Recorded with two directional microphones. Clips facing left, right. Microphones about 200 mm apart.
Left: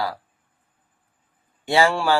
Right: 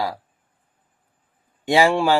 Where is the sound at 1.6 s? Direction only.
15° right (ahead or behind).